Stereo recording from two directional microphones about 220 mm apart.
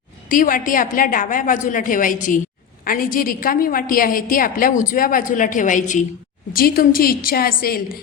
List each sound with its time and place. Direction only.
0.3 s a woman's voice: 40° left (ahead or behind)